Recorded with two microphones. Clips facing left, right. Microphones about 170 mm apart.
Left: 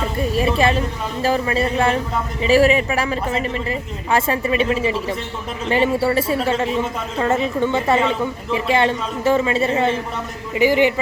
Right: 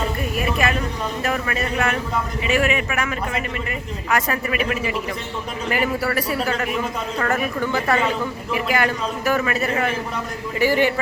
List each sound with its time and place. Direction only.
0.2 s a man's voice: 30° left (ahead or behind)